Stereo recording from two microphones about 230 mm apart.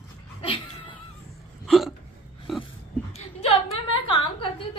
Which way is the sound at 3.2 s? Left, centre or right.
Left.